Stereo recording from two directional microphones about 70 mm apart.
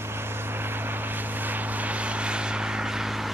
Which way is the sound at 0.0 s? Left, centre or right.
Right.